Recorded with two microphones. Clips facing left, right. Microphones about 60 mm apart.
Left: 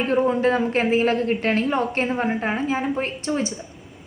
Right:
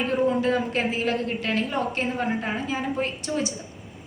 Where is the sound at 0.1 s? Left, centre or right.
Left.